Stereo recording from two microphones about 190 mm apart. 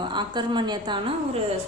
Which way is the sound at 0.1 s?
25° right (ahead or behind).